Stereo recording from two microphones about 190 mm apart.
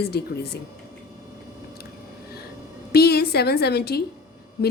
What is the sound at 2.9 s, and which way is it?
A woman's voice, 55° left (ahead or behind).